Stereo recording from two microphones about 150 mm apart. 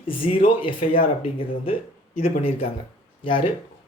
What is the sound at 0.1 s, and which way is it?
Speech, 35° left (ahead or behind).